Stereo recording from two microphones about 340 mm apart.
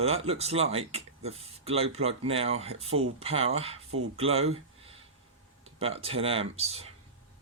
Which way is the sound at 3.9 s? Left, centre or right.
Right.